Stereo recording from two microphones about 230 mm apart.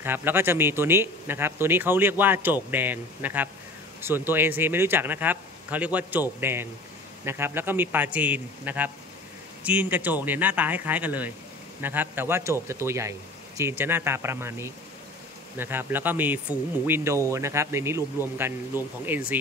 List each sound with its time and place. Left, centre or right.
0.0 s speech: centre